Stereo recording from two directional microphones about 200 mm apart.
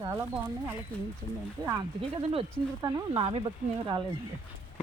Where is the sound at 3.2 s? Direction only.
30° right (ahead or behind).